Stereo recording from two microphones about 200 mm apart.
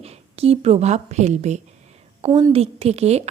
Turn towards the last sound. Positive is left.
turn(degrees=-30)  # may be behind; listen again after turning